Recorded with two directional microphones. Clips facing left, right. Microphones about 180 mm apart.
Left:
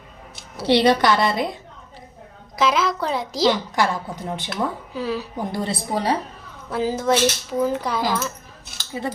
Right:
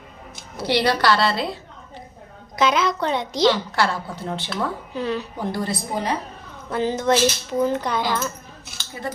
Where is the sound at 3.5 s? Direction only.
15° left (ahead or behind).